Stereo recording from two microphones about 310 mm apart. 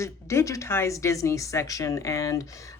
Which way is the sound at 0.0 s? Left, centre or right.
Centre.